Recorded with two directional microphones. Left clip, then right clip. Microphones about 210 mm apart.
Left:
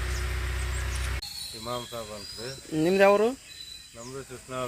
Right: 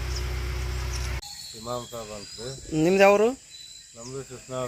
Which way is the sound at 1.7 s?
15° left (ahead or behind).